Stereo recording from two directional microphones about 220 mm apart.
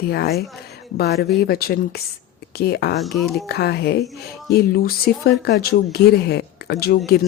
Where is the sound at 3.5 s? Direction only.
45° left (ahead or behind).